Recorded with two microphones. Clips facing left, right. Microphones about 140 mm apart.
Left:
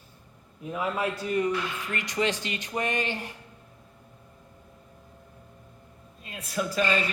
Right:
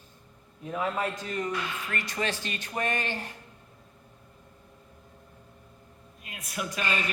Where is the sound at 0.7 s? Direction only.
10° left (ahead or behind).